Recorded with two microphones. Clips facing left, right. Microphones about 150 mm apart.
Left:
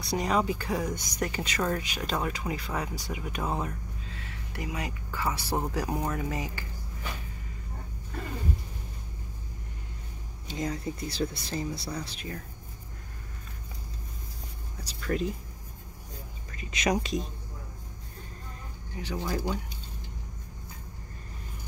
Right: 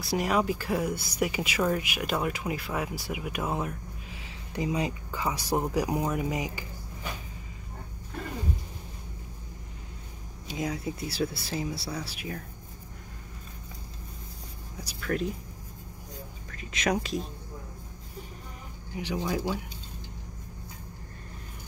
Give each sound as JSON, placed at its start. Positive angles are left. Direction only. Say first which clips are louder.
{"t": 0.0, "sound": "speech", "louder": "right 1 dB", "side_deg": -5}
{"t": 10.5, "sound": "speech", "louder": "right 1 dB", "side_deg": -10}
{"t": 15.0, "sound": "speech", "louder": "even", "side_deg": 0}
{"t": 16.5, "sound": "speech", "louder": "even", "side_deg": 0}
{"t": 18.9, "sound": "speech", "louder": "right 3 dB", "side_deg": -15}
{"t": 19.2, "sound": "speech", "louder": "right 1 dB", "side_deg": -5}